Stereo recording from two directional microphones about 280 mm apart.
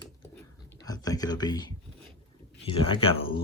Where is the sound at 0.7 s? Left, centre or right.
Centre.